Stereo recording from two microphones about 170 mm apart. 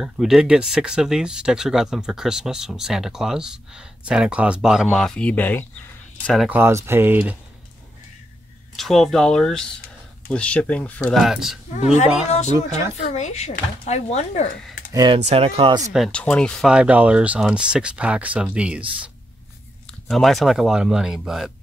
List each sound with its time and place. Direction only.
0.0 s speech: centre (ahead or behind)
6.5 s speech: 15° right (ahead or behind)
8.7 s speech: centre (ahead or behind)
11.7 s speech: 45° left (ahead or behind)
14.9 s speech: 25° right (ahead or behind)
15.1 s speech: 40° right (ahead or behind)
15.9 s speech: 5° left (ahead or behind)
20.1 s speech: centre (ahead or behind)